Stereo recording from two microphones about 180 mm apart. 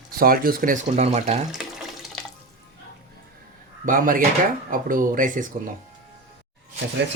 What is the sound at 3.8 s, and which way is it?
Speech, 50° right (ahead or behind).